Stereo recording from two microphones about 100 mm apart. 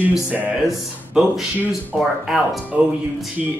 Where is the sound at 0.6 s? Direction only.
5° right (ahead or behind).